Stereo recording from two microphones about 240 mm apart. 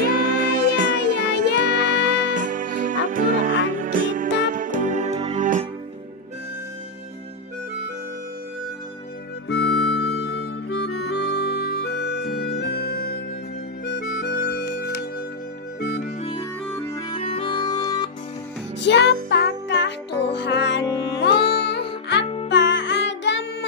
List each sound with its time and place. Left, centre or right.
0.0 s music: right
9.5 s music: left
14.2 s music: left
16.2 s music: left
16.7 s music: centre
17.1 s music: left
19.2 s music: left
20.8 s music: centre
21.5 s music: left
22.2 s music: left
22.5 s music: left